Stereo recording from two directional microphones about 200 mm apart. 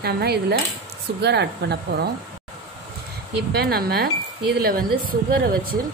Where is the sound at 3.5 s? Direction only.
50° right (ahead or behind).